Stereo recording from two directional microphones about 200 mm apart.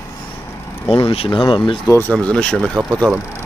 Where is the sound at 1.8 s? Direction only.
10° left (ahead or behind).